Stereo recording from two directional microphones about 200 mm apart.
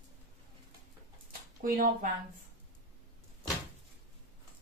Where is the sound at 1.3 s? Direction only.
45° right (ahead or behind).